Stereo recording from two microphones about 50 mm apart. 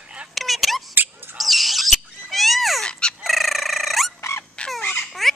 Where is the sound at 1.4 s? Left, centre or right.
Centre.